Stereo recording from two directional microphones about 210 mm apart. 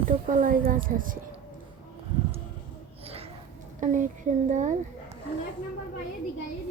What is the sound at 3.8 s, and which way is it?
Speech, 35° right (ahead or behind).